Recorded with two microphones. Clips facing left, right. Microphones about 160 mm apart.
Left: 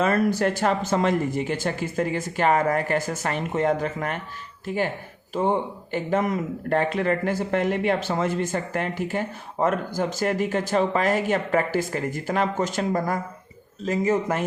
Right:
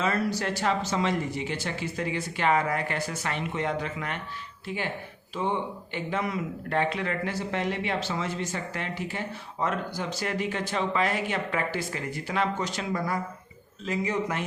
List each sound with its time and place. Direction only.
0.0 s speech: 50° left (ahead or behind)